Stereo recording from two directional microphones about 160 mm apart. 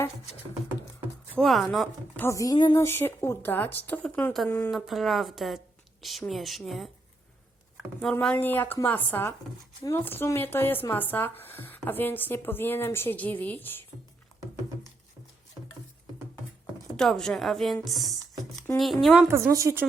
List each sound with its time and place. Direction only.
1.4 s a woman's voice: centre (ahead or behind)
2.2 s speech: 20° left (ahead or behind)
2.7 s speech: 15° left (ahead or behind)
4.7 s a woman's voice: centre (ahead or behind)
8.2 s speech: 10° left (ahead or behind)
17.0 s a woman's voice: 5° left (ahead or behind)
19.3 s speech: 15° right (ahead or behind)